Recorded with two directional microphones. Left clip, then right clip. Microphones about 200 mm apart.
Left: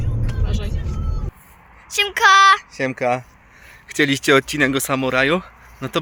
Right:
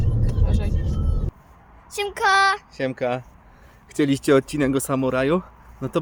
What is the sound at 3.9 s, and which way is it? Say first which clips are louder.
Speech: left 3 dB; 5° right (ahead or behind).